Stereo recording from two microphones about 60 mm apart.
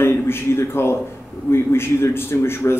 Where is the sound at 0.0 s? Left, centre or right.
Left.